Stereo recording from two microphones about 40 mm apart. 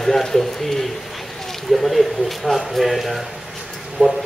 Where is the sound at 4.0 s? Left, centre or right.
Right.